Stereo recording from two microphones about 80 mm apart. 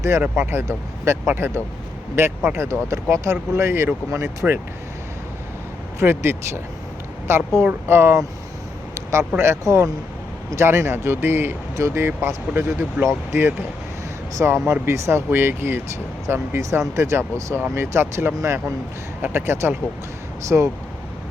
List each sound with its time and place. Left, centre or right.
0.3 s speech: right
1.3 s speech: right
2.1 s speech: right
6.0 s speech: right
9.0 s vehicle: right
9.4 s speech: right
14.3 s speech: right
20.5 s speech: centre